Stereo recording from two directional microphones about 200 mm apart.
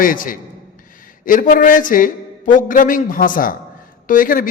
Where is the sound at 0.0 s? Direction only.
45° left (ahead or behind).